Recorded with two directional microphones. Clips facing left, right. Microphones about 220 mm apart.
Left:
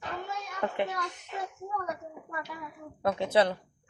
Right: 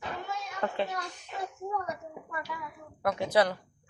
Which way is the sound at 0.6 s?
20° left (ahead or behind).